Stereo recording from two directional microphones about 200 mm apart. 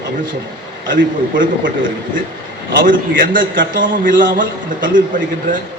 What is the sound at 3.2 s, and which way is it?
A man's voice, 45° right (ahead or behind).